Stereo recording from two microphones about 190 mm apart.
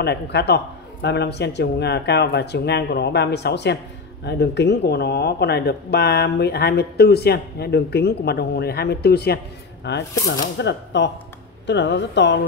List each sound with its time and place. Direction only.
0.0 s a woman's voice: 60° left (ahead or behind)